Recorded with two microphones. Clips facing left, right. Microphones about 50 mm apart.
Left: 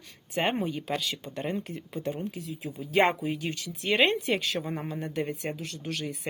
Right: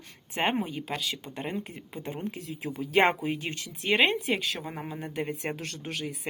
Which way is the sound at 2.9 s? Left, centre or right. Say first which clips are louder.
Even; right.